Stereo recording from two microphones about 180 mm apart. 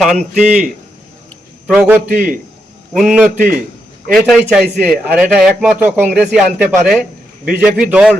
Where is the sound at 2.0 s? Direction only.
50° right (ahead or behind).